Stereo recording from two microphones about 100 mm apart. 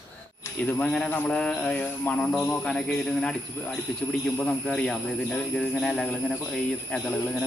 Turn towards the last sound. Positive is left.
turn(degrees=10)  # may be behind; listen again after turning